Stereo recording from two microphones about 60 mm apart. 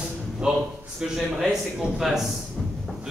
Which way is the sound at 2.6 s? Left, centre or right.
Centre.